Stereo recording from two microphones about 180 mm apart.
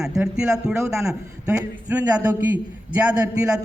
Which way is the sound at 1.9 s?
10° right (ahead or behind).